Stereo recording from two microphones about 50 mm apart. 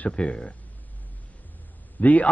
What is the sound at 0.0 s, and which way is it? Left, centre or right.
Speech, left.